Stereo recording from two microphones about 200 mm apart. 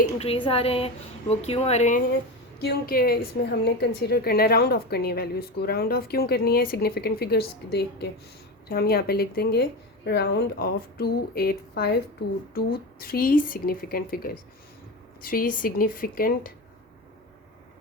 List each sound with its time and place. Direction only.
0.0 s speech: 30° left (ahead or behind)
2.6 s a woman's voice: 50° left (ahead or behind)